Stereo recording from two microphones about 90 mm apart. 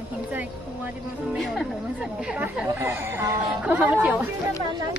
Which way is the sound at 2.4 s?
25° right (ahead or behind).